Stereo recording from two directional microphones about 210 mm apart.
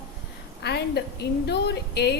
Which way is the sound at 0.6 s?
50° left (ahead or behind).